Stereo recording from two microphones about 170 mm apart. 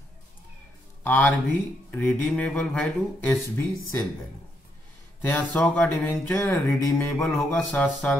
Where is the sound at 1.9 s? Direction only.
5° left (ahead or behind).